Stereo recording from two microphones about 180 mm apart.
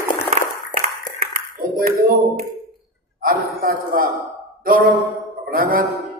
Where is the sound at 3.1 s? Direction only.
50° right (ahead or behind).